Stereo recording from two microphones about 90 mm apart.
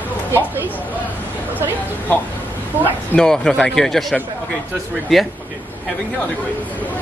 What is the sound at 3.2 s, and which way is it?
A man's voice, 5° left (ahead or behind).